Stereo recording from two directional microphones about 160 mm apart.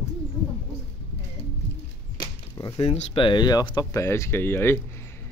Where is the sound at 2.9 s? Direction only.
35° left (ahead or behind); by 4.8 s 15° left (ahead or behind).